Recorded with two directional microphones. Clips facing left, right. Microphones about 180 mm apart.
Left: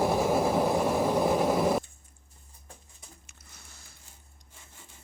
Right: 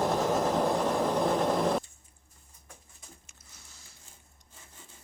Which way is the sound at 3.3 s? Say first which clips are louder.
Left 3 dB; 60° left (ahead or behind).